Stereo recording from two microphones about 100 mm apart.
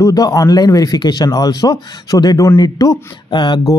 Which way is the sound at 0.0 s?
35° left (ahead or behind).